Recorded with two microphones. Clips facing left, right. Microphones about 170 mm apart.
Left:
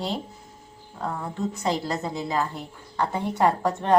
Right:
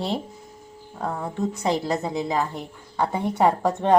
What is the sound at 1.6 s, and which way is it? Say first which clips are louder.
A woman's voice: right 3 dB; 20° right (ahead or behind).